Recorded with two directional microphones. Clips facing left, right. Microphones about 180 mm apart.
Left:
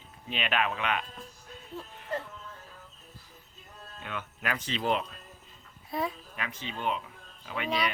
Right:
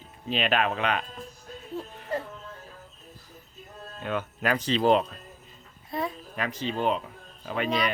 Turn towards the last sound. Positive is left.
turn(degrees=0)  # may be behind; listen again after turning